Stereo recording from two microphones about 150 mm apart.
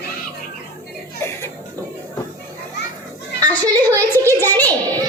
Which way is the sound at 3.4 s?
25° right (ahead or behind).